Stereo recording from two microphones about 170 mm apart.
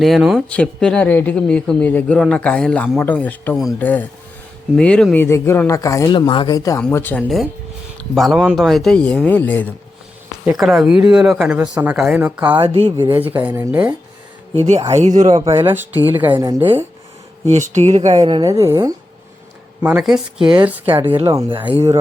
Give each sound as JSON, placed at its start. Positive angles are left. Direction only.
{"t": 0.0, "sound": "speech", "side_deg": 0}
{"t": 6.1, "sound": "speech", "side_deg": 30}
{"t": 10.6, "sound": "speech", "side_deg": 0}
{"t": 12.7, "sound": "speech", "side_deg": -35}
{"t": 13.1, "sound": "speech", "side_deg": -10}
{"t": 14.7, "sound": "speech", "side_deg": -40}
{"t": 15.6, "sound": "speech", "side_deg": -10}
{"t": 17.5, "sound": "speech", "side_deg": -40}
{"t": 18.2, "sound": "speech", "side_deg": -25}
{"t": 19.8, "sound": "speech", "side_deg": -5}